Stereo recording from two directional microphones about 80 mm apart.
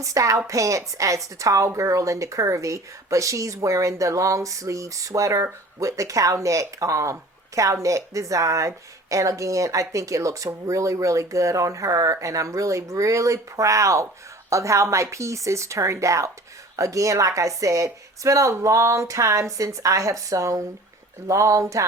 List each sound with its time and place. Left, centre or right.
0.0 s a woman's voice: right